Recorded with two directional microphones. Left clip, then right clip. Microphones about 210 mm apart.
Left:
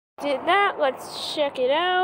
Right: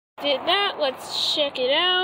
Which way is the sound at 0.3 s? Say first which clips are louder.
Left 1 dB; 30° left (ahead or behind).